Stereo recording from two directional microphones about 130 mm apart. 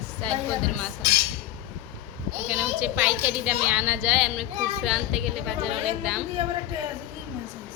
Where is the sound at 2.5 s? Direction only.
10° right (ahead or behind).